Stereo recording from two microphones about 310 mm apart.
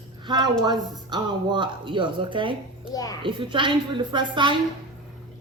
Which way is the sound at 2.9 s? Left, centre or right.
Centre.